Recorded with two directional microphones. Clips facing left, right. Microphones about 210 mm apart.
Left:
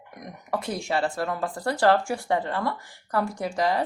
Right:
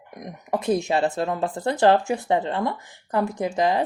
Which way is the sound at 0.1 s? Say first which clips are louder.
Right 3 dB; 20° right (ahead or behind).